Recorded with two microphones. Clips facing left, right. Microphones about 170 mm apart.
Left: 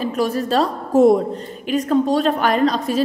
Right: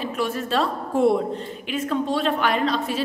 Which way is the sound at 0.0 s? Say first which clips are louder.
Left 5 dB; 40° left (ahead or behind).